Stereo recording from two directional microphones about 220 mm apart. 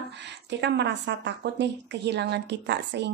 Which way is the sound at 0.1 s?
50° right (ahead or behind).